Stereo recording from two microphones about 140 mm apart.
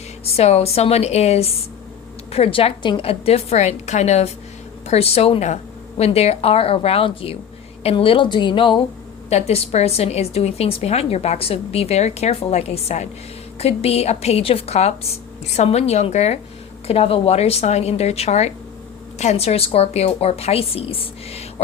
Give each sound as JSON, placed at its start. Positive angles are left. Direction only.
{"t": 0.3, "sound": "a woman's voice", "side_deg": 50}
{"t": 9.3, "sound": "a woman's voice", "side_deg": 50}